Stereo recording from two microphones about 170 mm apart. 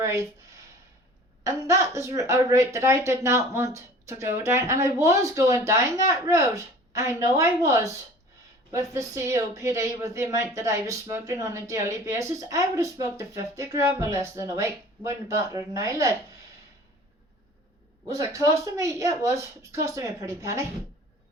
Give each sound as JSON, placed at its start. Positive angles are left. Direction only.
{"t": 0.0, "sound": "speech", "side_deg": -20}
{"t": 1.5, "sound": "speech", "side_deg": -15}
{"t": 18.1, "sound": "speech", "side_deg": -20}